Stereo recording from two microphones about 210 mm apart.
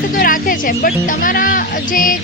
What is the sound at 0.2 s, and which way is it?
Speech, 40° left (ahead or behind).